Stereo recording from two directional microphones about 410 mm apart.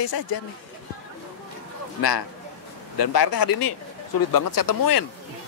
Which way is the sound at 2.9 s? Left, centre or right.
Left.